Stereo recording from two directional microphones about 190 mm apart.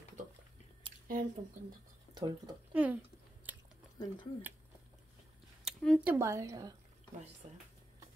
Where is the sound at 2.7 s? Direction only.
10° right (ahead or behind).